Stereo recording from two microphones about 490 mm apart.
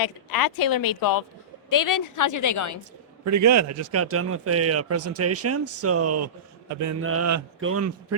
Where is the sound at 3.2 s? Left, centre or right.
Right.